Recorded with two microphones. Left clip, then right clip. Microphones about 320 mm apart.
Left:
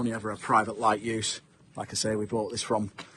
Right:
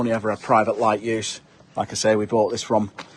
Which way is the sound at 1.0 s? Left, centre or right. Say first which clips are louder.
Right 6 dB; centre.